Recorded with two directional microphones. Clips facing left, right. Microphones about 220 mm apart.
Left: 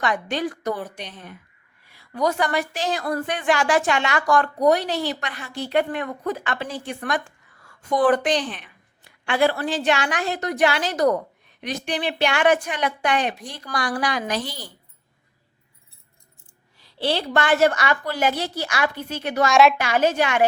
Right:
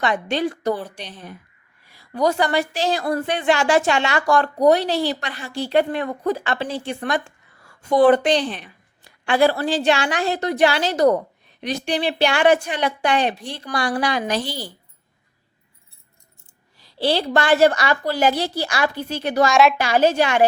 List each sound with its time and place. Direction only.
0.0 s a woman's voice: 25° right (ahead or behind)
16.7 s a woman's voice: 40° right (ahead or behind)
19.5 s a woman's voice: centre (ahead or behind)
19.7 s a woman's voice: 35° right (ahead or behind)